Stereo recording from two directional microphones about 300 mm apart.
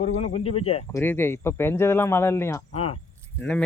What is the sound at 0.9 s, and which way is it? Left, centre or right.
Speech, centre.